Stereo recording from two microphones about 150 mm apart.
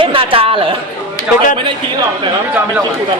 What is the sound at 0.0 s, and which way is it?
Speech, 35° right (ahead or behind).